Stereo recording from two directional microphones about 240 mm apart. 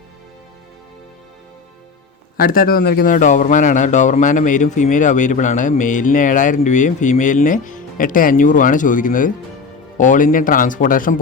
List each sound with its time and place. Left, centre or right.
2.4 s a man's voice: left